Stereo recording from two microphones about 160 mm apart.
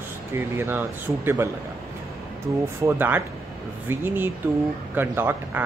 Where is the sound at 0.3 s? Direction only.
15° right (ahead or behind).